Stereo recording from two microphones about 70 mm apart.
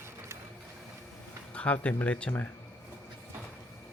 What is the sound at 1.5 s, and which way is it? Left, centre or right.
Speech, centre.